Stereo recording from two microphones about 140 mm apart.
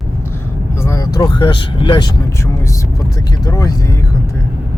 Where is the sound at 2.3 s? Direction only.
20° left (ahead or behind).